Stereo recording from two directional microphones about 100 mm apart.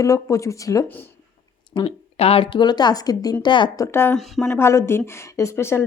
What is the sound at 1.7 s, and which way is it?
Speech, 70° left (ahead or behind).